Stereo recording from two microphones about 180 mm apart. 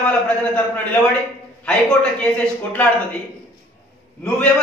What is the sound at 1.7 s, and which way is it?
A man's voice, 5° left (ahead or behind).